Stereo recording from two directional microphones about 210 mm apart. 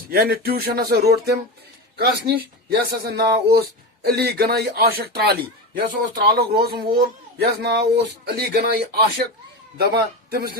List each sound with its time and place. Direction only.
0.1 s speech: 45° right (ahead or behind)
10.2 s speech: 50° right (ahead or behind)